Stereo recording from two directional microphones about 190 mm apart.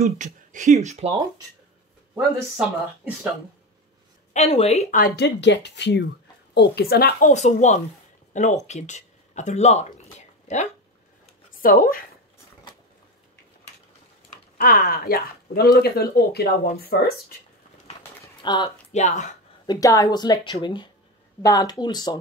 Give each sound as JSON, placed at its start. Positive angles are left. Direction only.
{"t": 0.0, "sound": "speech", "side_deg": -40}
{"t": 2.1, "sound": "speech", "side_deg": -15}
{"t": 4.3, "sound": "a woman's voice", "side_deg": 35}
{"t": 4.9, "sound": "speech", "side_deg": 45}
{"t": 5.2, "sound": "speech", "side_deg": 65}
{"t": 11.5, "sound": "speech", "side_deg": 50}
{"t": 14.6, "sound": "speech", "side_deg": 45}
{"t": 18.2, "sound": "a sound", "side_deg": 20}
{"t": 18.9, "sound": "speech", "side_deg": 40}
{"t": 19.6, "sound": "speech", "side_deg": 20}